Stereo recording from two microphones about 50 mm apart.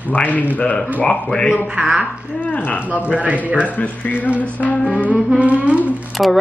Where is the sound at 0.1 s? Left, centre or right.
Left.